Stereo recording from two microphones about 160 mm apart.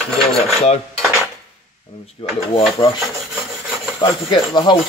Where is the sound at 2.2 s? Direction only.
35° left (ahead or behind).